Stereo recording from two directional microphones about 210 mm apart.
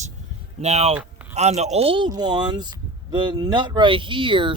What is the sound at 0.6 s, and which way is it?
Speech, 30° right (ahead or behind).